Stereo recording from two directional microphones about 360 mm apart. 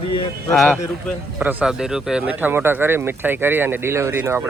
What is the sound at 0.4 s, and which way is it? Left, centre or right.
A man's voice, centre.